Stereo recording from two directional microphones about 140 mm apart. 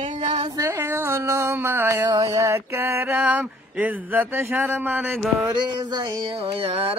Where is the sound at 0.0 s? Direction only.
55° right (ahead or behind).